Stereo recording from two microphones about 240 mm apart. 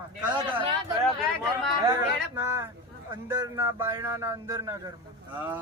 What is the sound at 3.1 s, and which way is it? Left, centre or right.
Speech, centre.